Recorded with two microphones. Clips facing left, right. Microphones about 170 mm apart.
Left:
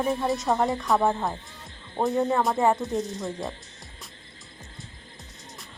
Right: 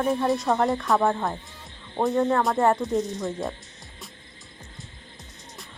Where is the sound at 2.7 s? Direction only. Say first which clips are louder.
Right 2 dB; centre (ahead or behind).